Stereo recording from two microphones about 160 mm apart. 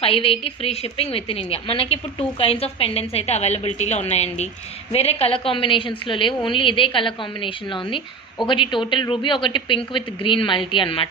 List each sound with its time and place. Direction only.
0.0 s a woman's voice: 35° left (ahead or behind)